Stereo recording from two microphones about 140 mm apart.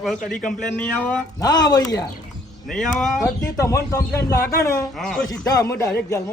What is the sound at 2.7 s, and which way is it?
Speech, 5° left (ahead or behind).